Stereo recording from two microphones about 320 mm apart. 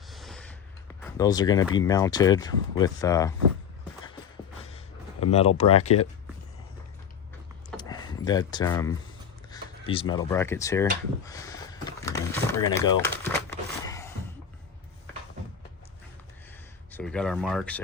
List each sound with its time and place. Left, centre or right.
0.1 s a sound: centre
1.1 s speech: centre
5.2 s speech: centre
7.8 s a sound: centre
9.5 s speech: centre
11.3 s drawer open or close: centre
16.9 s speech: centre